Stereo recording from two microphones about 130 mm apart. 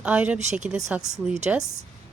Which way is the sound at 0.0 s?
10° right (ahead or behind).